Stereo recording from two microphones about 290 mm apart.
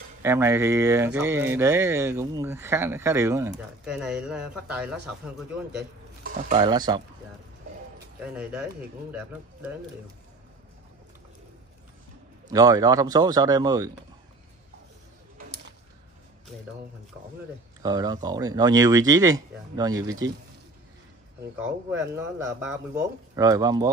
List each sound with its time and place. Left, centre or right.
0.2 s speech: centre
6.3 s speech: centre
8.2 s speech: centre
12.4 s speech: centre
17.8 s speech: centre
21.5 s speech: centre